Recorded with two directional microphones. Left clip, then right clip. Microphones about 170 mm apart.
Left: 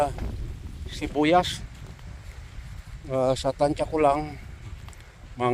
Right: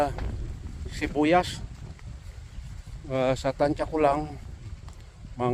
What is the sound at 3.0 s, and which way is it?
Speech, 5° left (ahead or behind).